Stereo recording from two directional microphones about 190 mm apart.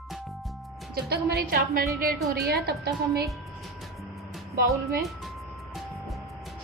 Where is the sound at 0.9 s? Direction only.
60° right (ahead or behind).